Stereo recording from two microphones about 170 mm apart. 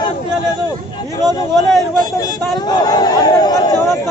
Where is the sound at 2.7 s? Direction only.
25° left (ahead or behind).